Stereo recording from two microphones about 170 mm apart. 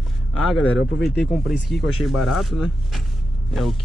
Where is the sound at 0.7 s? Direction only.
80° left.